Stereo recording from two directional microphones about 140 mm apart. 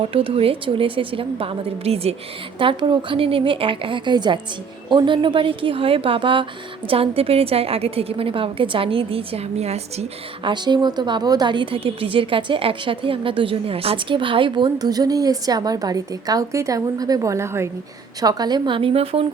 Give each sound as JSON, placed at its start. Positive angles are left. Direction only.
{"t": 0.1, "sound": "a woman's voice", "side_deg": -40}
{"t": 10.8, "sound": "a woman's voice", "side_deg": -30}